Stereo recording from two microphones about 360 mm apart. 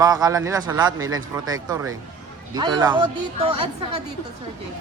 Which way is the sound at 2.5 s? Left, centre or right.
Centre.